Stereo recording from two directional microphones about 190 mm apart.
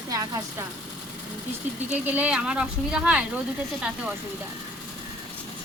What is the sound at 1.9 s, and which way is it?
Speech, 10° right (ahead or behind).